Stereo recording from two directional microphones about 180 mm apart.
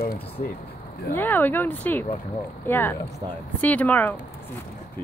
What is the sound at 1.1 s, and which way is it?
Speech, 10° left (ahead or behind).